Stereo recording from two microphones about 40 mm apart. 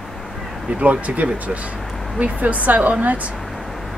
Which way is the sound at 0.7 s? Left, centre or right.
Right.